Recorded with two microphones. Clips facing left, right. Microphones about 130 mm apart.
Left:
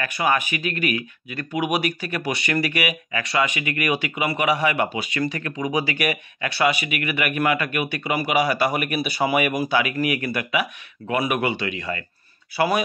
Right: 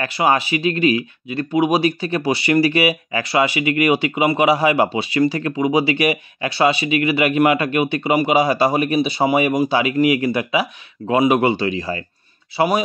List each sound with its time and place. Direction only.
0.0 s speech: 25° right (ahead or behind)